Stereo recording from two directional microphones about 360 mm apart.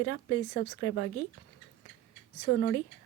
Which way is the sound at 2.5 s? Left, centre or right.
Left.